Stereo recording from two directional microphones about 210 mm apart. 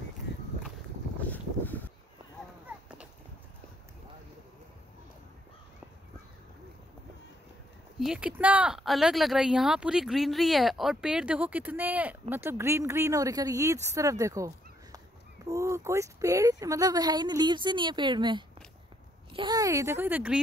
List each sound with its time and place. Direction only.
1.2 s boat: 10° left (ahead or behind)
8.0 s speech: 5° right (ahead or behind)